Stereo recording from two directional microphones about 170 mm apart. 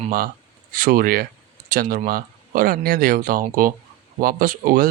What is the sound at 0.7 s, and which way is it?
Speech, 55° right (ahead or behind).